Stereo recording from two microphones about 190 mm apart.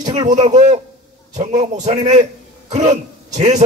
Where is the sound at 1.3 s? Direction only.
40° right (ahead or behind).